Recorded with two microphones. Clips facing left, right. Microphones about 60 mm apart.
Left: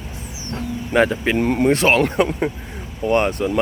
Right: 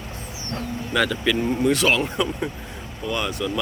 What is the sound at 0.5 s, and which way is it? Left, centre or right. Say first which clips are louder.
Speech: left 5 dB; left.